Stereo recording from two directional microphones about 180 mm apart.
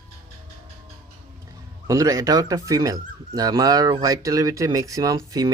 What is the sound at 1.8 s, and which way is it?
Speech, 20° right (ahead or behind).